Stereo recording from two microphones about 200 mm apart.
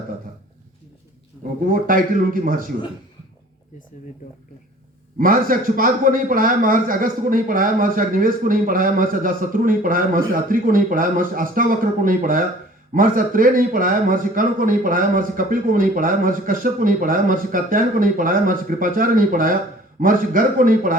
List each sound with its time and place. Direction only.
1.6 s a man's voice: 45° right (ahead or behind)
5.1 s a man's voice: 45° right (ahead or behind)